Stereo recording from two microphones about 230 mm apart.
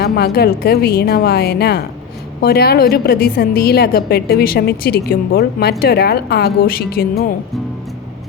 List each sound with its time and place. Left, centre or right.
0.0 s a woman's voice: left